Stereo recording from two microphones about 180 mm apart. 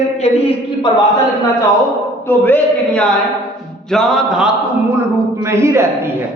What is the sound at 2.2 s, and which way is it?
A man's voice, 10° left (ahead or behind).